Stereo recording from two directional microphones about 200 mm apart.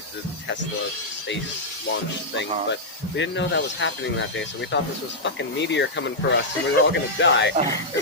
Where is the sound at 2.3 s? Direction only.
60° left (ahead or behind).